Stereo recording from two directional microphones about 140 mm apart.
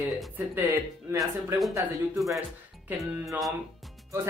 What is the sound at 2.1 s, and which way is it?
Speech, centre (ahead or behind).